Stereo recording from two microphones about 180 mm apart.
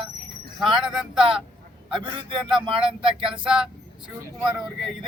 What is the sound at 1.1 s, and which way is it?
Speech, 30° right (ahead or behind).